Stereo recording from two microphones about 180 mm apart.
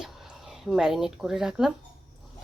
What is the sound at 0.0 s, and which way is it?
Speech, centre (ahead or behind).